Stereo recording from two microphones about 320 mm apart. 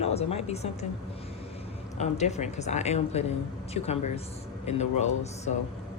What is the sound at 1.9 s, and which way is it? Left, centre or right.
Speech, left.